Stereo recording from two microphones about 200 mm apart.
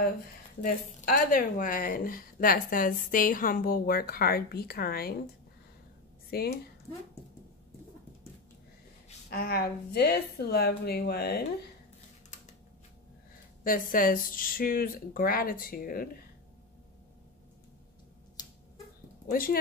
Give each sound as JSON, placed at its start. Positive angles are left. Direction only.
{"t": 0.6, "sound": "a woman's voice", "side_deg": 45}
{"t": 6.3, "sound": "a woman's voice", "side_deg": 50}
{"t": 9.3, "sound": "a woman's voice", "side_deg": 50}
{"t": 13.7, "sound": "a woman's voice", "side_deg": 45}